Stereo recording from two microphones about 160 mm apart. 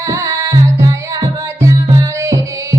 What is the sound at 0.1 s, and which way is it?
Music, 20° right (ahead or behind).